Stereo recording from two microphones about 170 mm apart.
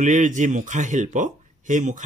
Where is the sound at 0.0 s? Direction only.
50° right (ahead or behind).